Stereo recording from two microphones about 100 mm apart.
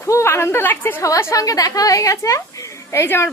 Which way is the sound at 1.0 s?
35° left (ahead or behind).